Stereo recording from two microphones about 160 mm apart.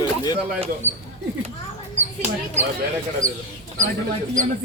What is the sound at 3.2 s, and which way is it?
Speech, 55° right (ahead or behind).